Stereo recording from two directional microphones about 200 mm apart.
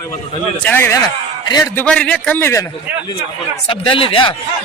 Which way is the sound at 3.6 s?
25° left (ahead or behind).